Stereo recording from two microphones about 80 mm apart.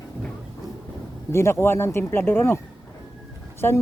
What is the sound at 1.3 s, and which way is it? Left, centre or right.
Speech, left.